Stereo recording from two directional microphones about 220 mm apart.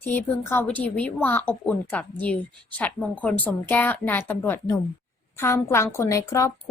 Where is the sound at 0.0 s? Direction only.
10° left (ahead or behind).